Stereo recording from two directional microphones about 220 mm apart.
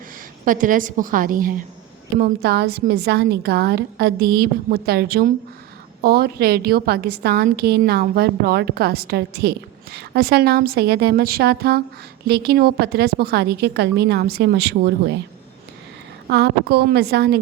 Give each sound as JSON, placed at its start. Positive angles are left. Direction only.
{"t": 0.4, "sound": "a woman's voice", "side_deg": -40}
{"t": 16.3, "sound": "a woman's voice", "side_deg": -50}